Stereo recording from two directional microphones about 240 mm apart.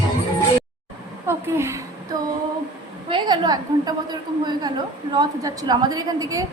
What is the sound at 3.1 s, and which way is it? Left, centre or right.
A woman's voice, centre.